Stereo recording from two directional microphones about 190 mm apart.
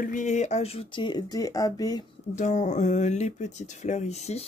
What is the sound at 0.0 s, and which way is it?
Speech, 40° left (ahead or behind).